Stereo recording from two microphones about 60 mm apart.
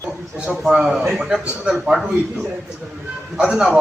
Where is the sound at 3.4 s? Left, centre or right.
Centre.